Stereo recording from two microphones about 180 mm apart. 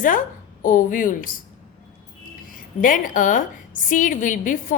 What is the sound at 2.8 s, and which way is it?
A woman's voice, 50° left (ahead or behind).